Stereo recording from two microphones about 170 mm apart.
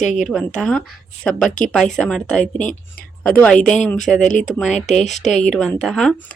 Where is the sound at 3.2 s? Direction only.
5° left (ahead or behind).